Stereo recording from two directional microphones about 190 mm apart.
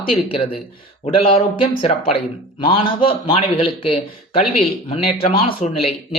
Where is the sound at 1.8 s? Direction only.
30° left (ahead or behind).